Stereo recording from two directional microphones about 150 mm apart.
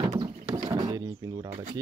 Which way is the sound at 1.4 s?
65° right (ahead or behind).